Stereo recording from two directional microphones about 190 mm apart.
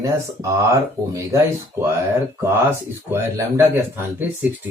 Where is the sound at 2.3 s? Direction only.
15° right (ahead or behind).